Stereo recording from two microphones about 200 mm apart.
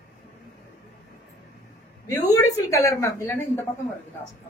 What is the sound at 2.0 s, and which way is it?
A woman's voice, 15° left (ahead or behind).